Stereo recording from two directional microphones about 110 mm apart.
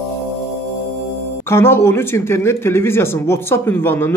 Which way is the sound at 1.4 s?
20° left (ahead or behind).